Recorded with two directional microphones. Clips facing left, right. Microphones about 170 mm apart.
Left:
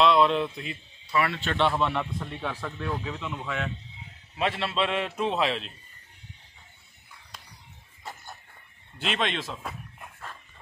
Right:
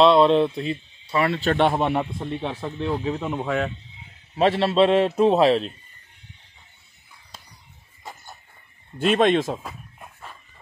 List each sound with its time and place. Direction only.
0.0 s speech: 30° right (ahead or behind)
2.1 s speech: 25° right (ahead or behind)
8.9 s speech: 50° right (ahead or behind)